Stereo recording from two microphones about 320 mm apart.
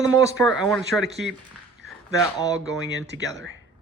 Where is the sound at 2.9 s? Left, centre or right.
Right.